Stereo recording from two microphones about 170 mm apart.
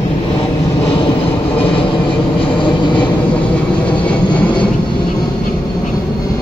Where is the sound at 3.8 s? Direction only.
5° left (ahead or behind).